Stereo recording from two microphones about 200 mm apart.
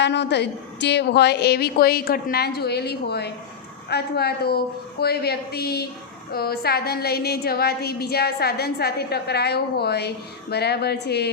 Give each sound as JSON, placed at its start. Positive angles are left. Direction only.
{"t": 0.0, "sound": "a woman's voice", "side_deg": 60}